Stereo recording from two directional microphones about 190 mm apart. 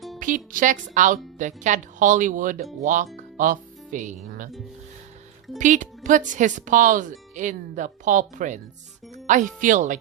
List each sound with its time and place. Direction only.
0.2 s a woman's voice: 45° right (ahead or behind)
5.5 s speech: 40° right (ahead or behind)